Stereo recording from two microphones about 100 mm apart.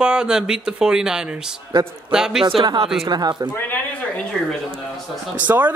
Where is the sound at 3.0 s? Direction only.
45° right (ahead or behind).